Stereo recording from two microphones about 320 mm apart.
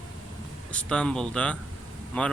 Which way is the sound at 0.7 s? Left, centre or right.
Centre.